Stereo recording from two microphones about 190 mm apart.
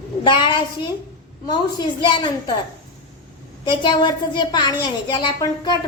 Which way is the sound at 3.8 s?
25° left (ahead or behind).